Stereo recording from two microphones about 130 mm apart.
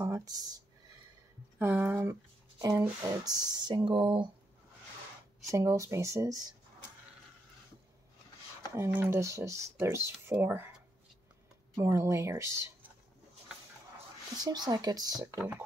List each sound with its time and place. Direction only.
0.0 s speech: 25° right (ahead or behind)
1.6 s speech: 15° right (ahead or behind)
3.0 s speech: 30° right (ahead or behind)
5.5 s speech: 25° right (ahead or behind)
8.7 s speech: 20° right (ahead or behind)
11.7 s speech: 20° right (ahead or behind)
14.3 s speech: 30° right (ahead or behind)